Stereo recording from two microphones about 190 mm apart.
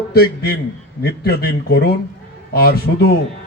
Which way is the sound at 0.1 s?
55° left (ahead or behind).